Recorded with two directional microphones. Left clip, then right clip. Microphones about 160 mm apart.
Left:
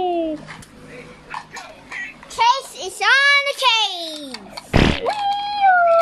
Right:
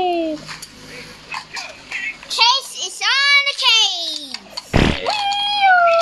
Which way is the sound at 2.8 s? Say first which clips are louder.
Left 2 dB; 75° left (ahead or behind).